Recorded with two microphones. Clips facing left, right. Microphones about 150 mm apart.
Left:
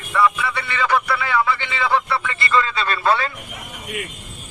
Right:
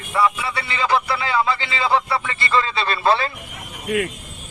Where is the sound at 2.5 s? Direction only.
30° right (ahead or behind).